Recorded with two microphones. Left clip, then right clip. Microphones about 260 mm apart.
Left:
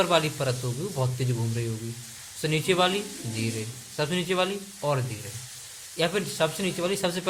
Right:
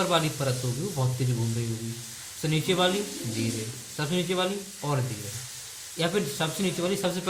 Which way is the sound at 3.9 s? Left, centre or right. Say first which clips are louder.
Left 2 dB; left.